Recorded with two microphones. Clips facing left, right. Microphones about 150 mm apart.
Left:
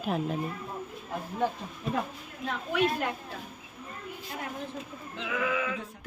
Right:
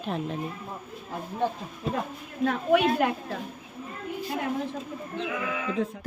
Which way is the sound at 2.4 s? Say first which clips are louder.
Right 6 dB; 65° right (ahead or behind).